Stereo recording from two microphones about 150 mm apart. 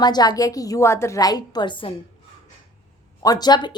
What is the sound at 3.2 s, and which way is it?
Speech, 25° left (ahead or behind).